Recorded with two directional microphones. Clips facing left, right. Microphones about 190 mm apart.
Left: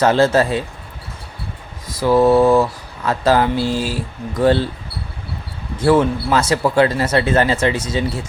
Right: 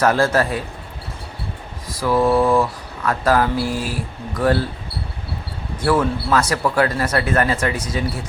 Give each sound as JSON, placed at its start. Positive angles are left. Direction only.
{"t": 0.0, "sound": "speech", "side_deg": 25}
{"t": 2.0, "sound": "speech", "side_deg": 25}
{"t": 5.8, "sound": "speech", "side_deg": 25}